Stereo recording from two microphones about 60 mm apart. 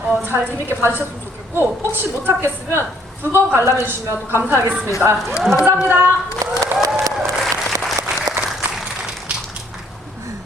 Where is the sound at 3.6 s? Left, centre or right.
Right.